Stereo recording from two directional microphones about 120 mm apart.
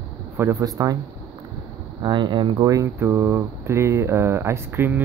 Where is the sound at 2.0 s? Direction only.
40° right (ahead or behind).